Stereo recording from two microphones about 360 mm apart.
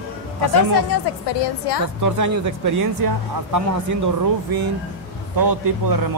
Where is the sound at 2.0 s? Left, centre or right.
Right.